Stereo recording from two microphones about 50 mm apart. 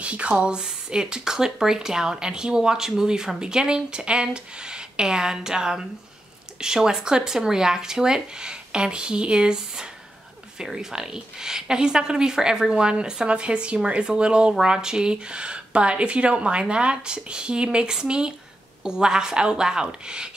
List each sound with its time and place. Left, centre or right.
0.0 s speech: right